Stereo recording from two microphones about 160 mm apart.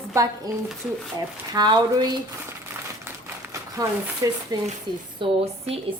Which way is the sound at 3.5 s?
20° right (ahead or behind).